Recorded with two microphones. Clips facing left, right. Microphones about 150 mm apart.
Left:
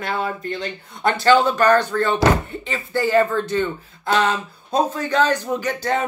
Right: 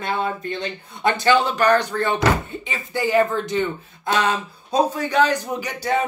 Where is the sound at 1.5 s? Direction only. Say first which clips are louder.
Left 2 dB; 15° right (ahead or behind).